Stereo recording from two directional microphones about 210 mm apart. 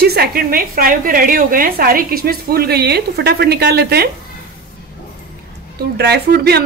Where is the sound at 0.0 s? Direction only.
50° right (ahead or behind).